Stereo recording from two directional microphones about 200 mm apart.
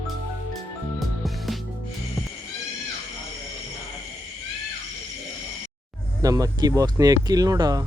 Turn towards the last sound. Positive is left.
turn(degrees=-20)  # may be behind; listen again after turning